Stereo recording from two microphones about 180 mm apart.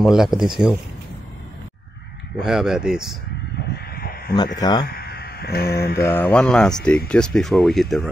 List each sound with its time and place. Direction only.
0.0 s speech: centre (ahead or behind)
2.3 s speech: 5° right (ahead or behind)
3.7 s a sound: 55° left (ahead or behind)
4.6 s speech: 20° left (ahead or behind)
4.8 s speech: 60° left (ahead or behind)
6.0 s speech: 10° left (ahead or behind)